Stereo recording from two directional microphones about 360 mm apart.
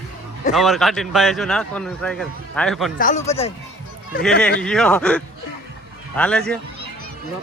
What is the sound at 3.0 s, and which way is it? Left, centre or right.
Speech, left.